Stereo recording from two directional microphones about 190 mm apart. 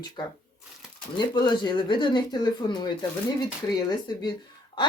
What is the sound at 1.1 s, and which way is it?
Speech, 25° left (ahead or behind).